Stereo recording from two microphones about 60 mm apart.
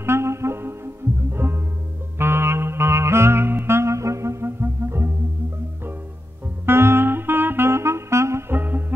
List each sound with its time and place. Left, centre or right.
0.0 s music: right
6.6 s saxophone: right
8.5 s music: right